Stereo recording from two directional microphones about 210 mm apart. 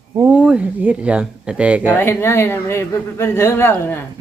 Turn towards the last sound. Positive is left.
turn(degrees=10)  # may be behind; listen again after turning